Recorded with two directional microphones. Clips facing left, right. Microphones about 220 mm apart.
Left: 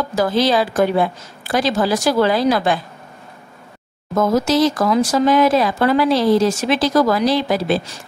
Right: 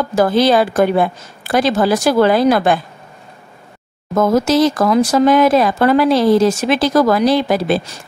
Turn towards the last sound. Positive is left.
turn(degrees=-55)  # may be behind; listen again after turning